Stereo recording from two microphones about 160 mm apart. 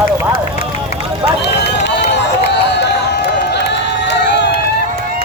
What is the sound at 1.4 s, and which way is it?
Run, 90° left.